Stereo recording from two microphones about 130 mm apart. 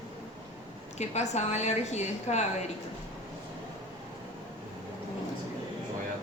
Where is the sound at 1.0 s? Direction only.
60° left (ahead or behind).